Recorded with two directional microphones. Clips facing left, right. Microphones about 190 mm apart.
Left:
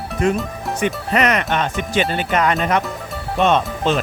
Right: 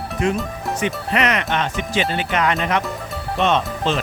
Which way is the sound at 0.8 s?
45° left (ahead or behind).